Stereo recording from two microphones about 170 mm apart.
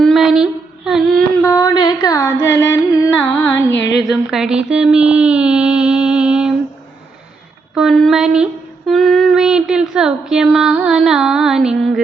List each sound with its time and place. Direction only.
0.0 s a sound: centre (ahead or behind)
1.5 s carnatic music: 20° left (ahead or behind)
4.0 s speech: 5° right (ahead or behind)
7.8 s child singing: centre (ahead or behind)